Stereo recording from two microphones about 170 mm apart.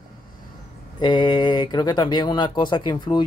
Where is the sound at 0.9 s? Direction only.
25° left (ahead or behind).